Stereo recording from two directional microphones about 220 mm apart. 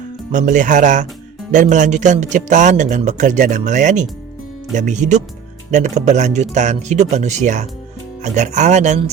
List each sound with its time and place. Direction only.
0.3 s speech: 35° right (ahead or behind)